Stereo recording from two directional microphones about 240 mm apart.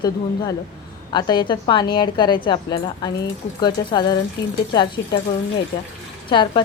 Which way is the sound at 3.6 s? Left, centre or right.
Centre.